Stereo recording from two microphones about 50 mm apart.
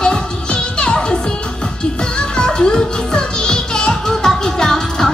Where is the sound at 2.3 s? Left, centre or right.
Centre.